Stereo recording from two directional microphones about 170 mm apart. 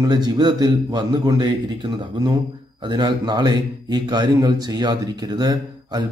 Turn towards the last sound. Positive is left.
turn(degrees=-25)  # may be behind; listen again after turning